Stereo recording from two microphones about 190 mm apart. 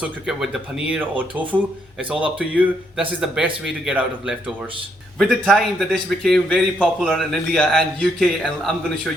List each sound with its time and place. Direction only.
0.0 s a man's voice: centre (ahead or behind)